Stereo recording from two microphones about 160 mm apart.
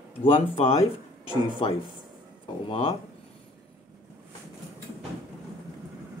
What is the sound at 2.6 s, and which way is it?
Speech, 35° left (ahead or behind).